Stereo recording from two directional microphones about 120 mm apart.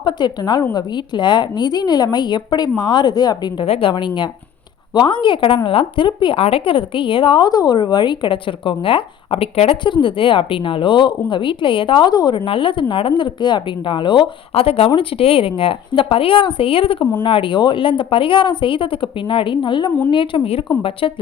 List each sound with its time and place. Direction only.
0.0 s a woman's voice: 40° left (ahead or behind)
3.7 s a woman's voice: 50° left (ahead or behind)
9.8 s a woman's voice: 45° left (ahead or behind)
12.5 s a woman's voice: 45° left (ahead or behind)
14.5 s a woman's voice: 55° left (ahead or behind)